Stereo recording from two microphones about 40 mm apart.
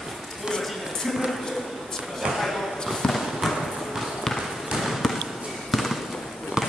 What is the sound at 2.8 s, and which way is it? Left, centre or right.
Basketball bounce, centre.